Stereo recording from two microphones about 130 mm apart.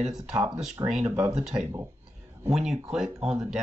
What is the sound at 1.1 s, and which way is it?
Speech, 20° right (ahead or behind).